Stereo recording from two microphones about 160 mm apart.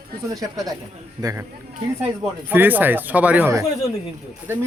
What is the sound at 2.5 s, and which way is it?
Speech, 10° right (ahead or behind).